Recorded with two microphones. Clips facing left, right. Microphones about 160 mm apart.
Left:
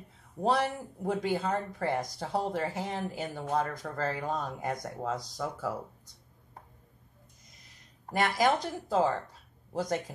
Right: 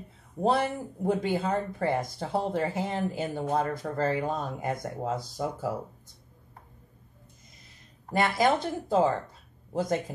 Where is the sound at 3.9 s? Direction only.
20° right (ahead or behind).